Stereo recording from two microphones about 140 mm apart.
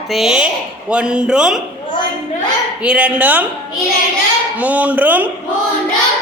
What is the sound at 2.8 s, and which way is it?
Speech, 10° right (ahead or behind).